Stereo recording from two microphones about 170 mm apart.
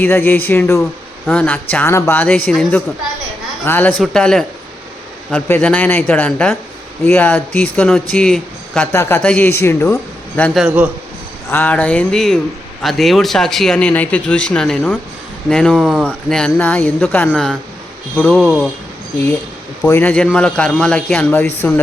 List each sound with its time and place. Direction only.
0.0 s a man's voice: 10° left (ahead or behind)
8.9 s a man's voice: 15° left (ahead or behind); by 18.7 s centre (ahead or behind)
19.8 s a man's voice: 10° left (ahead or behind)